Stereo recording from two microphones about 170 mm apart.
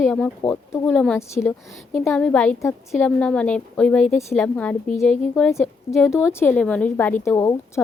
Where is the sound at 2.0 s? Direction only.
5° left (ahead or behind).